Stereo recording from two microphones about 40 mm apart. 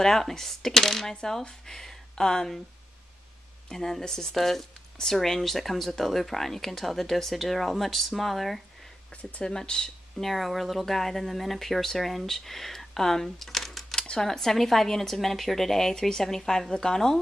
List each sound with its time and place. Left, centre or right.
0.0 s a woman's voice: centre
3.6 s speech: centre
9.4 s speech: centre
10.1 s speech: centre
13.9 s a sound: centre
14.2 s a woman's voice: centre